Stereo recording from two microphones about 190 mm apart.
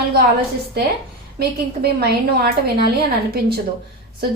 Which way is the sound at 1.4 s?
55° right (ahead or behind).